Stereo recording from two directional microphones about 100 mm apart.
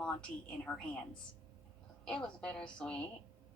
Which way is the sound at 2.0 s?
10° left (ahead or behind).